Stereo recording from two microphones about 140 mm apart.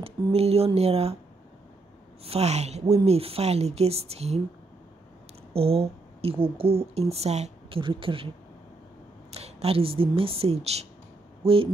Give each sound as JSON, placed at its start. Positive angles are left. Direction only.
{"t": 0.0, "sound": "a woman's voice", "side_deg": -45}
{"t": 2.2, "sound": "a woman's voice", "side_deg": -50}
{"t": 5.5, "sound": "speech", "side_deg": -45}
{"t": 7.8, "sound": "speech", "side_deg": -35}
{"t": 9.3, "sound": "a woman's voice", "side_deg": -45}